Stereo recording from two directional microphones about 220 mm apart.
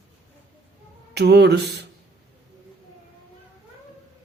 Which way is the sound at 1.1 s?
50° right (ahead or behind).